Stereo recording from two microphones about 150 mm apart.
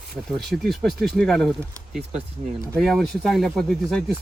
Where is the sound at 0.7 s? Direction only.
Centre (ahead or behind).